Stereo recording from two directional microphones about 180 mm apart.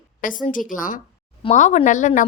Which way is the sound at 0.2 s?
50° left (ahead or behind).